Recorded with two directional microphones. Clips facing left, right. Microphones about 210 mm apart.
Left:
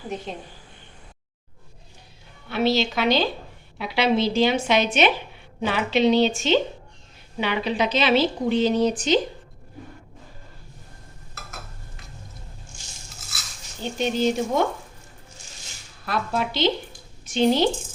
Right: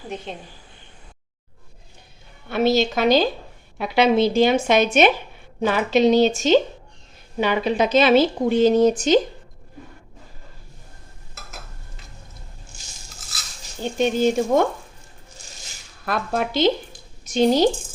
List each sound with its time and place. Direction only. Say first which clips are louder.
2.5 s a woman's voice: right 3 dB; 45° right (ahead or behind)
14.0 s a woman's voice: right 4 dB; 50° right (ahead or behind)
16.0 s a woman's voice: right 2 dB; 50° right (ahead or behind)